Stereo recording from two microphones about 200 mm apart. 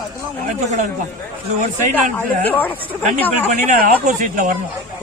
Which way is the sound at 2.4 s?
10° left (ahead or behind).